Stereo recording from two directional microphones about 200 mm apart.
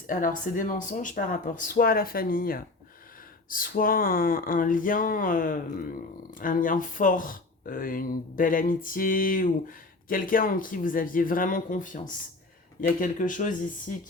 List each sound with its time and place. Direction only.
0.1 s speech: 40° left (ahead or behind)